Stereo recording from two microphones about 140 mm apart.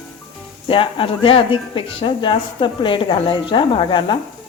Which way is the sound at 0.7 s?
40° left (ahead or behind).